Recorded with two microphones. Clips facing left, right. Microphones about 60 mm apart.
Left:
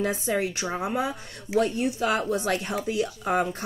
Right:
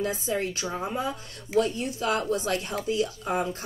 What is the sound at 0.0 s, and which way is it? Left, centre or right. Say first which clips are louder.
A woman's voice: left 2 dB; left.